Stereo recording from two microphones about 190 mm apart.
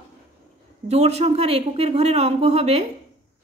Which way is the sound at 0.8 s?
35° right (ahead or behind).